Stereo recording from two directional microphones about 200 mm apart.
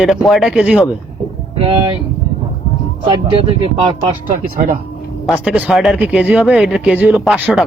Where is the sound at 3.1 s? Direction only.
25° right (ahead or behind).